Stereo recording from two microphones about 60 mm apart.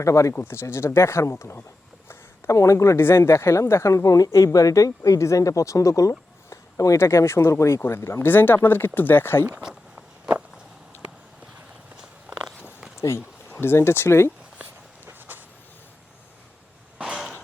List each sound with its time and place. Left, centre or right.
0.0 s speech: left
0.3 s speech: left
3.0 s speech: left
7.0 s speech: left
9.5 s a sound: centre
13.0 s speech: left
14.6 s walk: right
17.0 s a sound: centre